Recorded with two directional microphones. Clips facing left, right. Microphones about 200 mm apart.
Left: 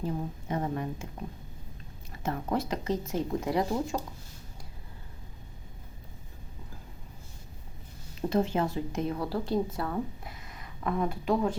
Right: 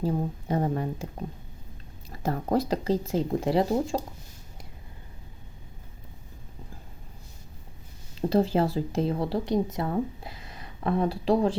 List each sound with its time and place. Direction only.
0.0 s speech: 35° right (ahead or behind)
2.0 s speech: 35° right (ahead or behind)
8.3 s speech: 35° right (ahead or behind)